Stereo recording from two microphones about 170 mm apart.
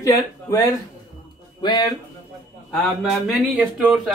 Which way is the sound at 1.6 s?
25° left (ahead or behind).